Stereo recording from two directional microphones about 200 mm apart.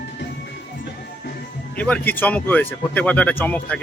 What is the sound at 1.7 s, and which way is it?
Speech, 5° left (ahead or behind).